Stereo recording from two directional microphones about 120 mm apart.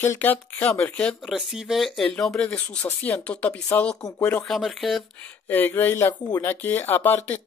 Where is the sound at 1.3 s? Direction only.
5° right (ahead or behind); by 3.6 s 10° left (ahead or behind).